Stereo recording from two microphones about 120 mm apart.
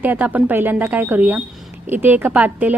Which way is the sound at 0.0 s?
15° right (ahead or behind).